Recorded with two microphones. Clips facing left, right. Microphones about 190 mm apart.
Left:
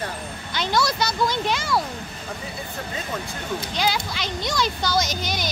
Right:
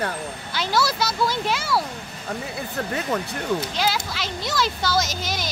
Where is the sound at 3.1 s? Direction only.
70° right (ahead or behind).